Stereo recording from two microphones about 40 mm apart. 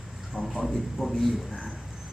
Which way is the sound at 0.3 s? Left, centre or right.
Left.